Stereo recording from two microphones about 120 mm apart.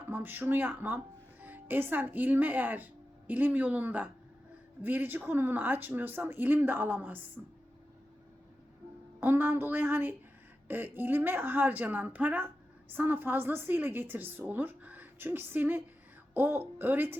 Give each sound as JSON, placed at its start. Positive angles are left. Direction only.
{"t": 0.1, "sound": "a woman's voice", "side_deg": -15}
{"t": 9.2, "sound": "a woman's voice", "side_deg": -20}